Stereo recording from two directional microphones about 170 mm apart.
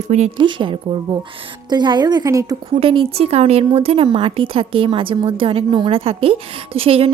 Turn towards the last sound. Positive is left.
turn(degrees=-35)  # may be behind; listen again after turning